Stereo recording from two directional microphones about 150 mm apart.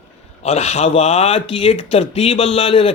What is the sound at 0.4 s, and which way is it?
A man's voice, 45° left (ahead or behind).